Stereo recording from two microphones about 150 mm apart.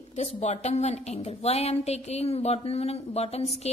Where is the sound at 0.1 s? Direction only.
50° left (ahead or behind).